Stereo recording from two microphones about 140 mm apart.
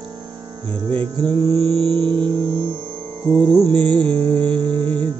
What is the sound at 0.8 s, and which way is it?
Mantra, 35° right (ahead or behind).